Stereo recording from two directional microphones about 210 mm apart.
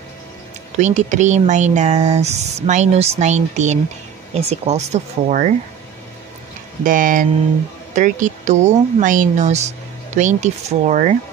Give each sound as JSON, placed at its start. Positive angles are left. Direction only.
{"t": 0.7, "sound": "a woman's voice", "side_deg": -35}
{"t": 6.8, "sound": "a woman's voice", "side_deg": -40}